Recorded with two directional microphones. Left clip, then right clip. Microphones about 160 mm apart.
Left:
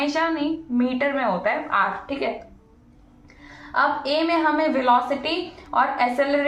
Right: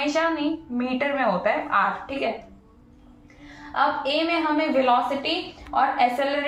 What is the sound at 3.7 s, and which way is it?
A woman's voice, 25° left (ahead or behind).